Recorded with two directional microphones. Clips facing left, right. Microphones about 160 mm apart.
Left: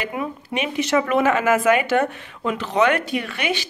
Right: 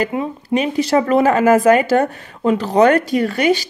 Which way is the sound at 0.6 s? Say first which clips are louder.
Right 5 dB; 35° right (ahead or behind).